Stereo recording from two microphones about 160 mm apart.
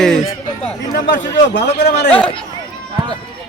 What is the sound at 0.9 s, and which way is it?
Speech, 90° left.